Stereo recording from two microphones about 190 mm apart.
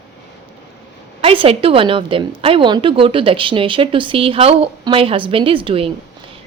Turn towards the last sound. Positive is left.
turn(degrees=-30)  # may be behind; listen again after turning